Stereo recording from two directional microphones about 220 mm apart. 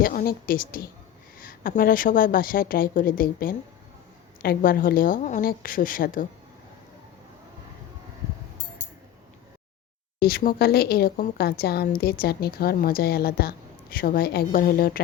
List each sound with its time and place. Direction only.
0.0 s a woman's voice: 40° left (ahead or behind)
10.2 s a woman's voice: 45° left (ahead or behind)